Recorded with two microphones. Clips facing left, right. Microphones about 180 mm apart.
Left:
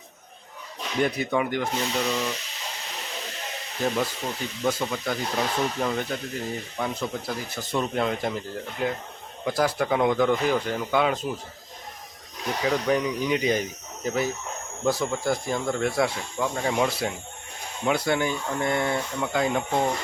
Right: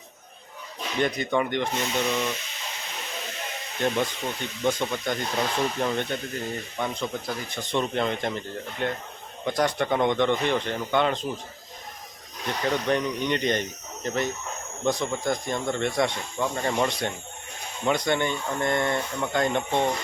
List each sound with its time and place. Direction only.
0.9 s speech: 5° left (ahead or behind)
3.8 s speech: 5° left (ahead or behind)
12.5 s speech: 5° left (ahead or behind)